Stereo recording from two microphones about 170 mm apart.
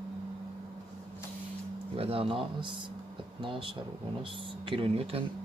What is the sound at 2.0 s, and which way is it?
Speech, 35° right (ahead or behind).